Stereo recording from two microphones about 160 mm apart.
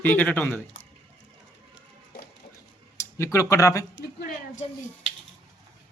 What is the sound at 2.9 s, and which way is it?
Speech, 20° left (ahead or behind).